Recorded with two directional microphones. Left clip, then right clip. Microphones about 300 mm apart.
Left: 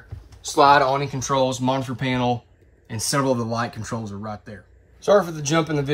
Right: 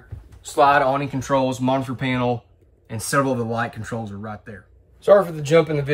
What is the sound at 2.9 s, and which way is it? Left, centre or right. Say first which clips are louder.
Speech: right 1 dB; centre.